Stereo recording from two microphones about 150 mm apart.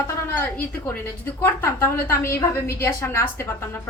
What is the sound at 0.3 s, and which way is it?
A woman's voice, 15° left (ahead or behind).